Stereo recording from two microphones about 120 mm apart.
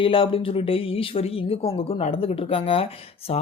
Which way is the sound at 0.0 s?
50° left (ahead or behind).